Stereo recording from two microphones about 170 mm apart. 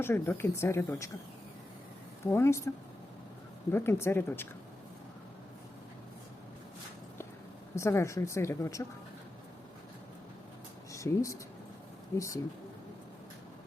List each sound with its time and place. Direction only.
0.0 s a woman's voice: 15° left (ahead or behind)
2.2 s a woman's voice: 15° left (ahead or behind)
3.7 s a woman's voice: 15° left (ahead or behind)
7.8 s a woman's voice: 15° left (ahead or behind)
10.9 s speech: 20° left (ahead or behind)